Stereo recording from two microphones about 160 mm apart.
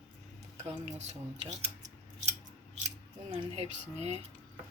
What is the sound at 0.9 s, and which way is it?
Speech, 45° right (ahead or behind).